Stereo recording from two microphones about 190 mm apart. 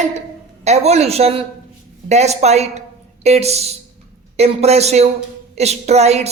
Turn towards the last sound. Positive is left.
turn(degrees=-35)  # may be behind; listen again after turning